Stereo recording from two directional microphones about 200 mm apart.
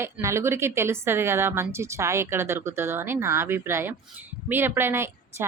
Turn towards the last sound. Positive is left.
turn(degrees=-10)  # may be behind; listen again after turning